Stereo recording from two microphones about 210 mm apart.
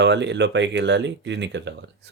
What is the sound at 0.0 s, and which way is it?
Speech, 55° right (ahead or behind).